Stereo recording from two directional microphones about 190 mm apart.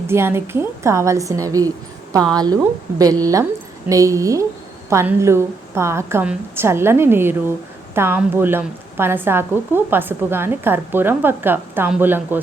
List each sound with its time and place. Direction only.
0.1 s a woman's voice: 15° right (ahead or behind)